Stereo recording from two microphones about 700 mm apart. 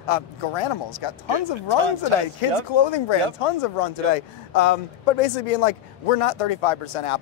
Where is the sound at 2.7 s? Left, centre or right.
Left.